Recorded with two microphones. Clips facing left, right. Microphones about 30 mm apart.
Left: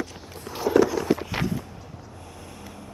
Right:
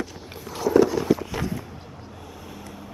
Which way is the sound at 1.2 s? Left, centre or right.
Left.